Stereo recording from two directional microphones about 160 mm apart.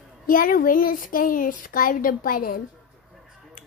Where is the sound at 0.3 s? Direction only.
60° left (ahead or behind).